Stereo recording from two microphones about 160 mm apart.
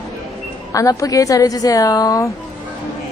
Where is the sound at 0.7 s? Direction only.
20° left (ahead or behind).